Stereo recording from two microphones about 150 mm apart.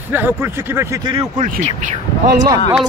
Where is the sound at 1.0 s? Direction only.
30° right (ahead or behind).